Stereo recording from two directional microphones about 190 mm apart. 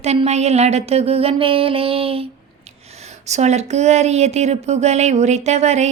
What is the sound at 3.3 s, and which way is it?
Speech, 35° right (ahead or behind).